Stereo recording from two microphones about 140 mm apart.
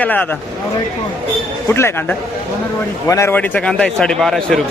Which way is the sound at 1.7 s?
15° left (ahead or behind).